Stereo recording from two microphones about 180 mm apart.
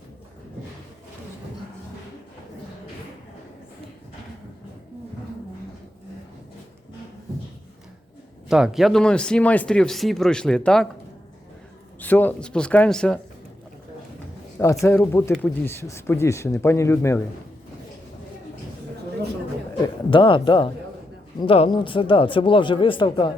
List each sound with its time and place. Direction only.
8.4 s speech: 5° right (ahead or behind)
11.9 s speech: 10° left (ahead or behind)
14.6 s speech: 15° left (ahead or behind)
19.8 s speech: 25° left (ahead or behind)